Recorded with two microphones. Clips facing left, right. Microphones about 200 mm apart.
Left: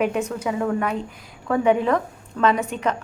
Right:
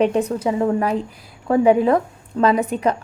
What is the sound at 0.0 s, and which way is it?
A woman's voice, 35° right (ahead or behind).